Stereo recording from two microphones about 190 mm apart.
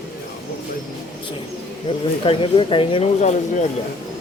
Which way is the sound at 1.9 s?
35° left (ahead or behind).